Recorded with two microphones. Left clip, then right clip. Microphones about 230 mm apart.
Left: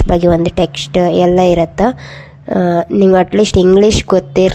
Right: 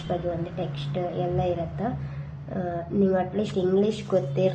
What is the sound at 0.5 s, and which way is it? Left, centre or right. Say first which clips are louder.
Speech: left 18 dB; left.